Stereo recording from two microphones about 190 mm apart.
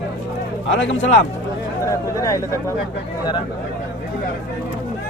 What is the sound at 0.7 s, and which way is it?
Speech, 75° left (ahead or behind).